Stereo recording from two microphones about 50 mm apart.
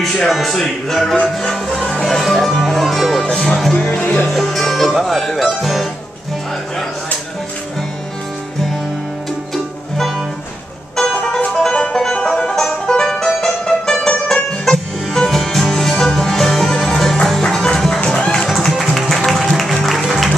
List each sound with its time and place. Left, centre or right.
0.3 s speech: centre
1.1 s music: left
2.0 s speech: centre
3.3 s music: centre
4.0 s music: left
4.3 s speech: centre
11.0 s music: centre
18.7 s music: centre